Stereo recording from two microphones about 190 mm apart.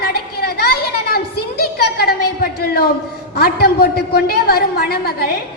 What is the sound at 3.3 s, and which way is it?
A woman's voice, 55° left (ahead or behind).